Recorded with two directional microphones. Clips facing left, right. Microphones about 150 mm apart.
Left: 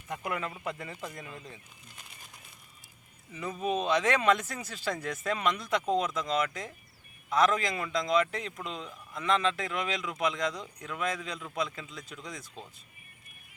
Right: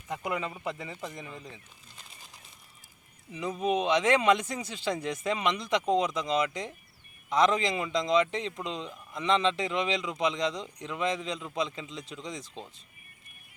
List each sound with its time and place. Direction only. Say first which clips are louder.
0.1 s speech: right 2 dB; 15° right (ahead or behind)
0.7 s speech: right 1 dB; centre (ahead or behind)
3.3 s speech: right 3 dB; 15° right (ahead or behind)